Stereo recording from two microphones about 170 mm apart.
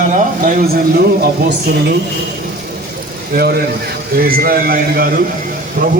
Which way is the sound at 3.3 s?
65° right (ahead or behind).